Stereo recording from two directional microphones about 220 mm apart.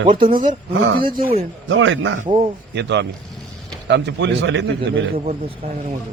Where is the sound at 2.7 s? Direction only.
50° right (ahead or behind).